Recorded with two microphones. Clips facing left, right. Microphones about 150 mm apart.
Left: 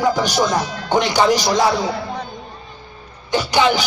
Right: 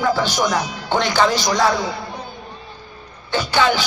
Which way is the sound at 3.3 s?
15° left (ahead or behind).